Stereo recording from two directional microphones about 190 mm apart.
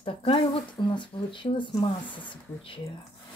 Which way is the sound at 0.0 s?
30° left (ahead or behind).